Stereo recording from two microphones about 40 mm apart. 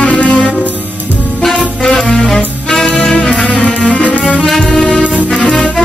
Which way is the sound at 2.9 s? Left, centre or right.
Left.